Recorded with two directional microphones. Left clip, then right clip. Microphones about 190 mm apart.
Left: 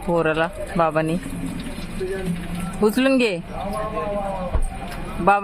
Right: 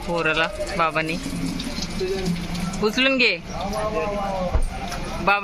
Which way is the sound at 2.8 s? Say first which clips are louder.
Even; 30° left (ahead or behind).